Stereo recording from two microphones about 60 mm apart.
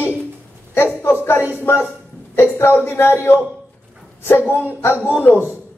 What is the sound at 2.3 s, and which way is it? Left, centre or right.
A man's voice, left.